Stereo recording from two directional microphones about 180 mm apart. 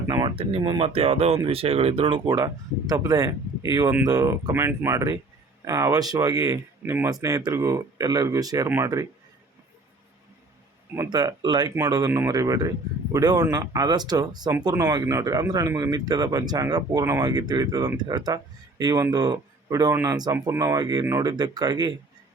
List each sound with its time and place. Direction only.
0.1 s speech: 25° right (ahead or behind)
10.9 s speech: 20° right (ahead or behind)